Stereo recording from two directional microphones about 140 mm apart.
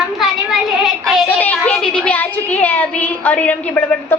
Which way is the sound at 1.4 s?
10° left (ahead or behind).